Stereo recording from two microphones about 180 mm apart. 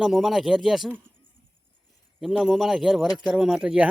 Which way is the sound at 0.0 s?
Centre (ahead or behind).